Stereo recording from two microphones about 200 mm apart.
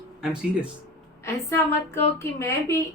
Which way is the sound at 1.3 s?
10° left (ahead or behind).